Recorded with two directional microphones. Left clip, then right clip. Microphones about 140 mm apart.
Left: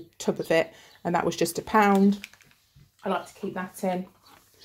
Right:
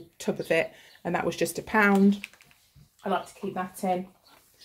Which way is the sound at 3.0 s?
60° left (ahead or behind).